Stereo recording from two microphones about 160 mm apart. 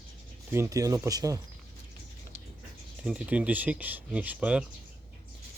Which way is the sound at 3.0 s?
5° right (ahead or behind).